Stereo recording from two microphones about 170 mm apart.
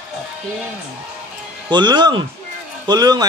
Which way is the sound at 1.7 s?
25° right (ahead or behind).